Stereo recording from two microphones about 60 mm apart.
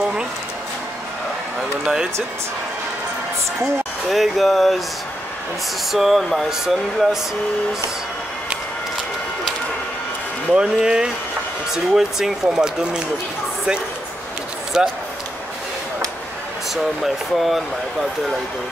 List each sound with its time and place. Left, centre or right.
0.0 s a sound: centre
1.6 s speech: centre
4.1 s speech: centre
5.9 s speech: centre
10.5 s speech: centre
14.7 s speech: centre
16.7 s speech: centre